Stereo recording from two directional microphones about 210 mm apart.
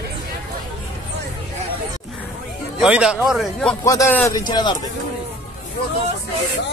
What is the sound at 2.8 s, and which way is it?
Speech, 5° right (ahead or behind).